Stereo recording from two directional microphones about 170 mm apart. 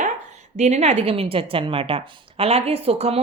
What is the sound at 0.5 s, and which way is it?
Speech, 40° right (ahead or behind).